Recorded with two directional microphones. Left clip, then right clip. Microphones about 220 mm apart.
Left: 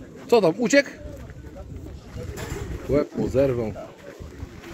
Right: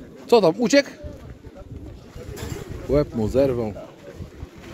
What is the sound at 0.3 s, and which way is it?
Speech, 15° right (ahead or behind).